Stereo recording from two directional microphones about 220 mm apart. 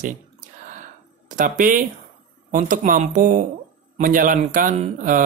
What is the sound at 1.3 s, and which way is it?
Speech, 35° right (ahead or behind).